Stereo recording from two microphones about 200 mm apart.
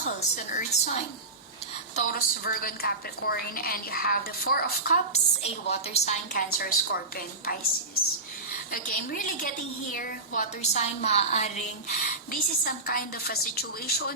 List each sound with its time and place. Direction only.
0.0 s a woman's voice: 45° left (ahead or behind)
2.0 s a woman's voice: 45° left (ahead or behind)
5.1 s a woman's voice: 30° left (ahead or behind)
6.3 s a woman's voice: 50° left (ahead or behind)
8.7 s a woman's voice: 45° left (ahead or behind)